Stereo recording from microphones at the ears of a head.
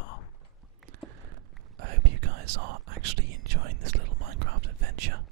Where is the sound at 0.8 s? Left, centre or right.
Right.